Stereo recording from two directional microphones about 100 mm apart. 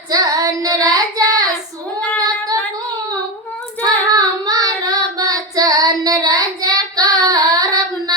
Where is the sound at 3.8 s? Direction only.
40° right (ahead or behind).